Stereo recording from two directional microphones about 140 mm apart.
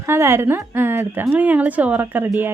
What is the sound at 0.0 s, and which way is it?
Speech, 20° right (ahead or behind).